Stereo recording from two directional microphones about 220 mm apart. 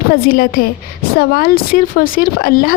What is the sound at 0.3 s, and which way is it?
A woman's voice, 40° left (ahead or behind).